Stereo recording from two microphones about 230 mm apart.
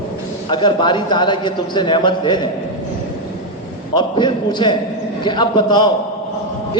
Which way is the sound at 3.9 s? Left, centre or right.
Centre.